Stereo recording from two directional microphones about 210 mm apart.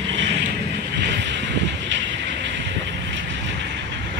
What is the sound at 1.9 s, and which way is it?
Vehicle, 60° right (ahead or behind).